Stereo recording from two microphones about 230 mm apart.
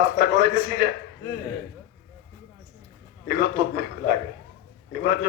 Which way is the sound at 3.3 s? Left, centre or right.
Right.